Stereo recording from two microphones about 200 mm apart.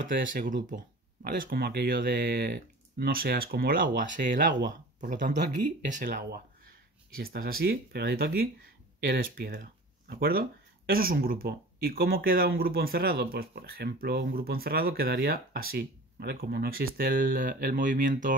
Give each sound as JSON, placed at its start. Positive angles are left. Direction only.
{"t": 1.2, "sound": "speech", "side_deg": -45}
{"t": 4.6, "sound": "speech", "side_deg": -55}
{"t": 5.1, "sound": "speech", "side_deg": -40}